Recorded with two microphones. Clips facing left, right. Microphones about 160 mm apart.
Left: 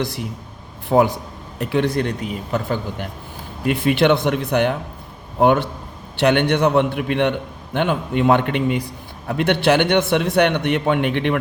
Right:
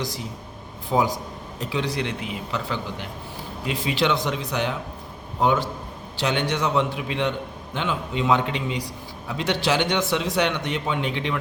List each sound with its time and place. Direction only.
0.0 s a man's voice: 60° left (ahead or behind)